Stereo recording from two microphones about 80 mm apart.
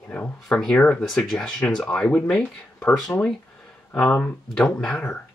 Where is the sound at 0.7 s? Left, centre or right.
Centre.